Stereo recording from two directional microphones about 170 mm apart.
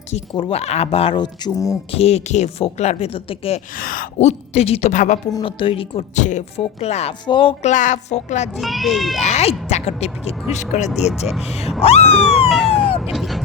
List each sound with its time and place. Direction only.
0.1 s speech: 35° left (ahead or behind)
1.9 s speech: 35° left (ahead or behind)
3.8 s a woman's voice: 55° left (ahead or behind)
5.3 s speech: 30° left (ahead or behind)
7.7 s a woman's voice: 45° left (ahead or behind)
8.5 s a child's voice: centre (ahead or behind)
9.1 s a woman's voice: 40° left (ahead or behind)
12.1 s police car: centre (ahead or behind)